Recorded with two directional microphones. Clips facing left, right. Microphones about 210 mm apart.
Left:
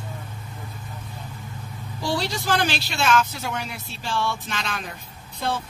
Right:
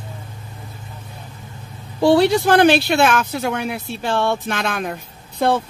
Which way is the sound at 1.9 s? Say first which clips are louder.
Right 13 dB; 60° right (ahead or behind).